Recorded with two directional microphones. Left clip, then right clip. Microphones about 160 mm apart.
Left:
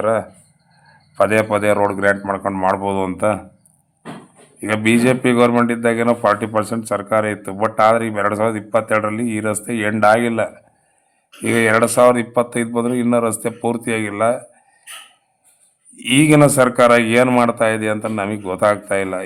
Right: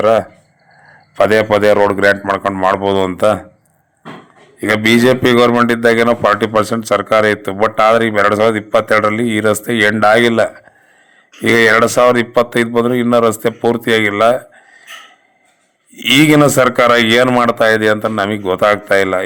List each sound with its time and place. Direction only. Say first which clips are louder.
0.0 s a man's voice: right 7 dB; 25° right (ahead or behind)
4.6 s a man's voice: right 5 dB; 20° right (ahead or behind)
16.0 s a man's voice: right 3 dB; 20° right (ahead or behind)